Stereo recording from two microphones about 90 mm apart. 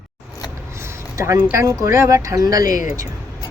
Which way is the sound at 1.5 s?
35° right (ahead or behind).